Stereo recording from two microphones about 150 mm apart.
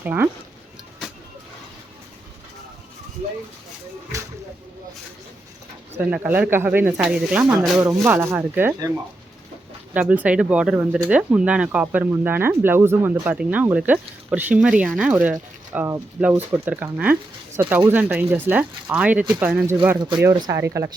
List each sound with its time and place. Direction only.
0.0 s speech: 15° right (ahead or behind)
6.0 s speech: 10° right (ahead or behind)
8.0 s speech: 15° right (ahead or behind)
9.9 s speech: 10° right (ahead or behind)